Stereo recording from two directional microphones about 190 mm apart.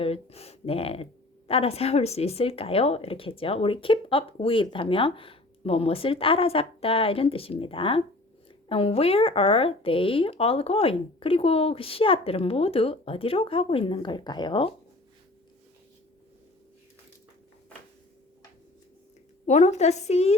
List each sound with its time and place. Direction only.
0.0 s speech: 30° left (ahead or behind)
19.5 s speech: 40° left (ahead or behind)